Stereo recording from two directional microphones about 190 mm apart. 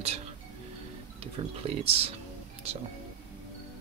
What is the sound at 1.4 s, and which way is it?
Speech, 30° right (ahead or behind).